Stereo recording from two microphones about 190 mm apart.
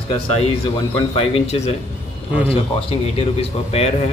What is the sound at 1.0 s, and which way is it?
Speech, 30° left (ahead or behind).